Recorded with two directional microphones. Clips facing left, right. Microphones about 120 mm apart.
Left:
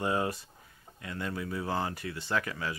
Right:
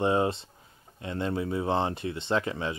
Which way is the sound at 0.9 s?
25° right (ahead or behind).